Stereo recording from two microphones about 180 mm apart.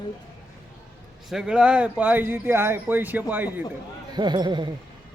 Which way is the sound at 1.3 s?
5° right (ahead or behind).